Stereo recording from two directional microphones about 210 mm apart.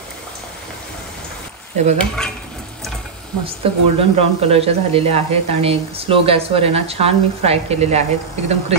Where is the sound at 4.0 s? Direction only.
30° right (ahead or behind).